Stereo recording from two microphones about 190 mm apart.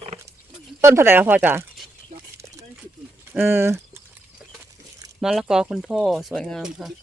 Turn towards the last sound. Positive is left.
turn(degrees=0)  # may be behind; listen again after turning